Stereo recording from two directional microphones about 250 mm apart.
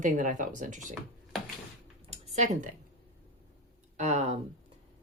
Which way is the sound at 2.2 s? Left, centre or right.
Right.